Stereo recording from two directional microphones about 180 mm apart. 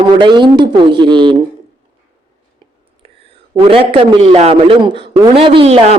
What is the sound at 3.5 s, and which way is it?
A man's voice, 30° right (ahead or behind).